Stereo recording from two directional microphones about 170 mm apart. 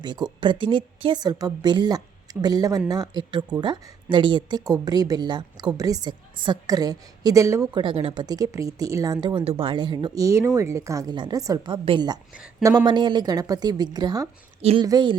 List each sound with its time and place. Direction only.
0.0 s speech: 25° right (ahead or behind)
14.6 s speech: 35° right (ahead or behind)
14.8 s speech: 25° right (ahead or behind)